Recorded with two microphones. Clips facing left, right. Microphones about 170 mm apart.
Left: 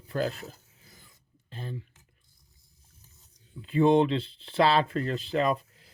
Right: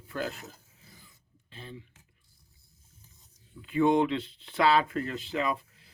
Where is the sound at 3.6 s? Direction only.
30° left (ahead or behind).